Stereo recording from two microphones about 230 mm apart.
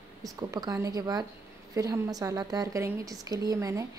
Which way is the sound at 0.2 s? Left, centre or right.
Centre.